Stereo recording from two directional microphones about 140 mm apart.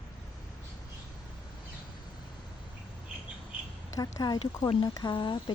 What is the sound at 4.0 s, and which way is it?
Speech, 25° left (ahead or behind).